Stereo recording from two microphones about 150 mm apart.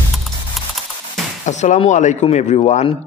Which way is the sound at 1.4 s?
50° left (ahead or behind).